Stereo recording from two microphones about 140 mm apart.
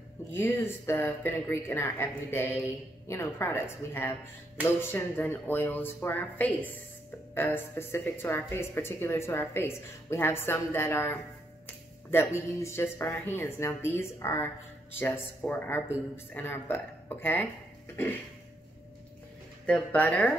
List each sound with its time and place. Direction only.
0.3 s speech: 15° left (ahead or behind)
19.6 s speech: 10° left (ahead or behind)